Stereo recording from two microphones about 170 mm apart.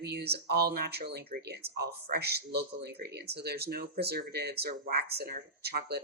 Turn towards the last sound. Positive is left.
turn(degrees=-70)  # may be behind; listen again after turning